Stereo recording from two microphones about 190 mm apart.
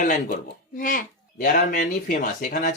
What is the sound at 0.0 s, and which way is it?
Speech, 45° left (ahead or behind).